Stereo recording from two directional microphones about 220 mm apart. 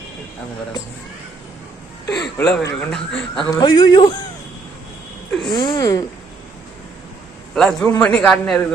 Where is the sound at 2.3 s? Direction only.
5° left (ahead or behind).